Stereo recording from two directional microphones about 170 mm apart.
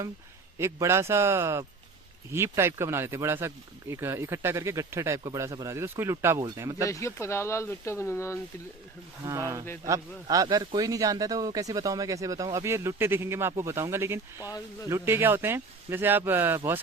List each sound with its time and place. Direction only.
0.6 s speech: 15° right (ahead or behind)
6.8 s speech: 15° left (ahead or behind)
9.2 s speech: 20° right (ahead or behind)